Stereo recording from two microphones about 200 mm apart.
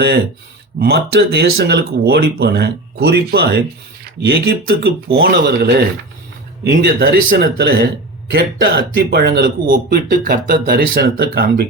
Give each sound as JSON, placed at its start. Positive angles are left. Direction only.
{"t": 0.8, "sound": "a man's voice", "side_deg": -55}